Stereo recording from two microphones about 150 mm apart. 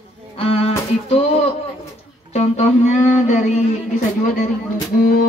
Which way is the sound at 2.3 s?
50° left (ahead or behind).